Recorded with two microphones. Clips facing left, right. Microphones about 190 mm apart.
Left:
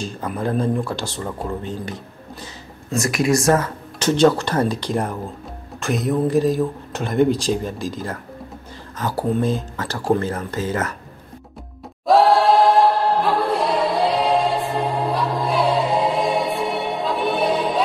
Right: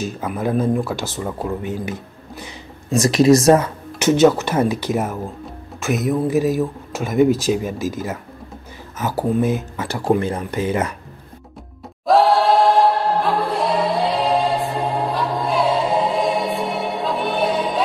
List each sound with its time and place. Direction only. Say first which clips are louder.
0.0 s speech: right 2 dB; 5° right (ahead or behind)
3.1 s speech: right 7 dB; 30° right (ahead or behind)
3.4 s speech: right 4 dB; 15° right (ahead or behind)
12.1 s choir: even; centre (ahead or behind)